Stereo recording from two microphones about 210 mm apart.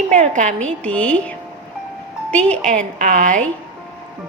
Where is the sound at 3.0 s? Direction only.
35° right (ahead or behind).